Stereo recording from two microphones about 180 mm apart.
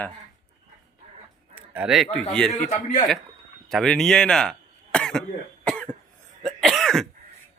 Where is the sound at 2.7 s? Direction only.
40° left (ahead or behind).